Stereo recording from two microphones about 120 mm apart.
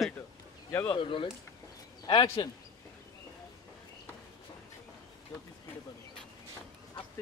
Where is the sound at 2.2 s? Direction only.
25° left (ahead or behind).